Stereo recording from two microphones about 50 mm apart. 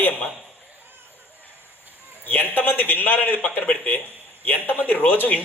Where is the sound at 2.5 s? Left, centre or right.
Left.